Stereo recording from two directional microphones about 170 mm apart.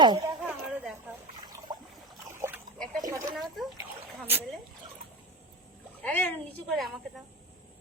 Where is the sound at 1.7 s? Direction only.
25° right (ahead or behind).